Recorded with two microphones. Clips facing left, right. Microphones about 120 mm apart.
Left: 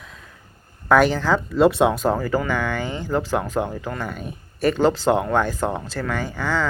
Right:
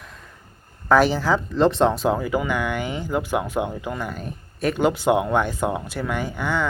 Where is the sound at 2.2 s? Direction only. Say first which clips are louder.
Left 1 dB; 15° right (ahead or behind).